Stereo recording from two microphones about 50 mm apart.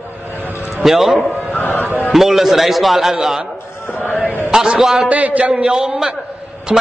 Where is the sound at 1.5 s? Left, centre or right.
Left.